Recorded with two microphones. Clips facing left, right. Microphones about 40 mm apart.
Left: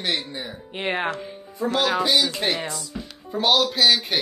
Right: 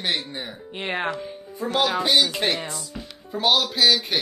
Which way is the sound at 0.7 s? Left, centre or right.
Centre.